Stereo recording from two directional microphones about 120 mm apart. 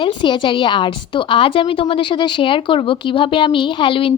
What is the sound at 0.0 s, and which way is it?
A woman's voice, 40° left (ahead or behind).